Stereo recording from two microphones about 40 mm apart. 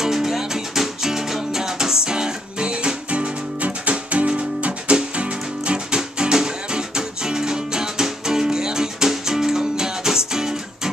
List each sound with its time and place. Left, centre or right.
0.0 s music: centre